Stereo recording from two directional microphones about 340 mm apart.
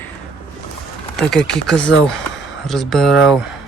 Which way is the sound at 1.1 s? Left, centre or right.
Centre.